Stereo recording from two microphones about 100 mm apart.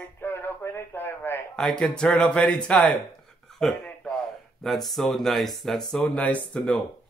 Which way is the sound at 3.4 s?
5° left (ahead or behind).